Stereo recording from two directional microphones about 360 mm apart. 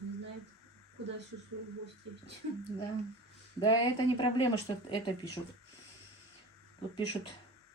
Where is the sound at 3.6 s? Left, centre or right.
Centre.